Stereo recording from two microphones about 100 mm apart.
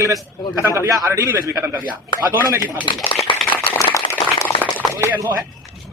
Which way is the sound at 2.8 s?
60° left (ahead or behind).